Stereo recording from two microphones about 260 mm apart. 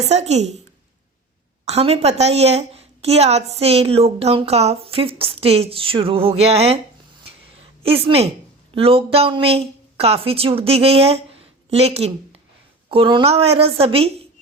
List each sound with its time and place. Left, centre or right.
0.0 s a woman's voice: right
1.6 s a woman's voice: right
7.9 s a woman's voice: right